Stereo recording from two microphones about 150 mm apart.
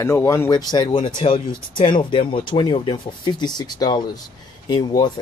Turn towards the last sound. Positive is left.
turn(degrees=25)  # may be behind; listen again after turning